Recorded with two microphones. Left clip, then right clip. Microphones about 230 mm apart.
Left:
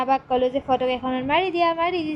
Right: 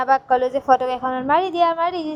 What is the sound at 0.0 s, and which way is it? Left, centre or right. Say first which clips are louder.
A woman's voice: right 3 dB; right.